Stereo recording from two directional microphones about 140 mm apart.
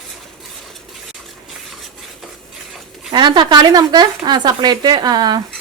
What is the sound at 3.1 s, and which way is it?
Speech, 35° right (ahead or behind).